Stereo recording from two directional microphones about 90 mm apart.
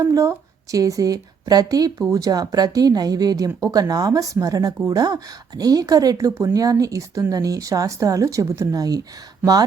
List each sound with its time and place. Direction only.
0.0 s a woman's voice: 35° right (ahead or behind)